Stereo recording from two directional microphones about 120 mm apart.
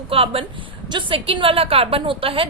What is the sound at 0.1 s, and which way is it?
A woman's voice, 50° right (ahead or behind).